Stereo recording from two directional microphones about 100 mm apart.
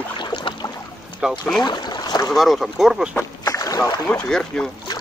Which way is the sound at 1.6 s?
45° left (ahead or behind).